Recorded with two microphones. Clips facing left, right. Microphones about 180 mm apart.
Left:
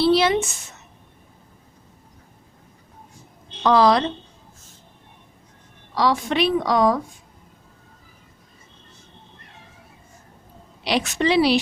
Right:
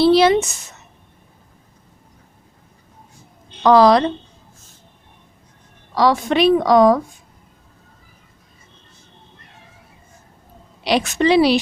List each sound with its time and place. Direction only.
0.0 s a sound: 40° right (ahead or behind)
3.6 s a woman's voice: 45° right (ahead or behind)
6.0 s a woman's voice: 45° right (ahead or behind)
10.8 s a woman's voice: 45° right (ahead or behind)